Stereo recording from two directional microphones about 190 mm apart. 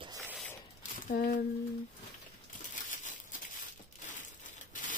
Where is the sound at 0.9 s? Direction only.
45° left (ahead or behind).